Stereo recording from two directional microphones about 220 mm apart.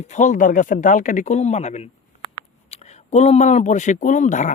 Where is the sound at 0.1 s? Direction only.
35° left (ahead or behind).